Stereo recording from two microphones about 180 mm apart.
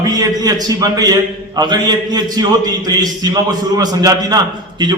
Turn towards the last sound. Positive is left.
turn(degrees=-25)  # may be behind; listen again after turning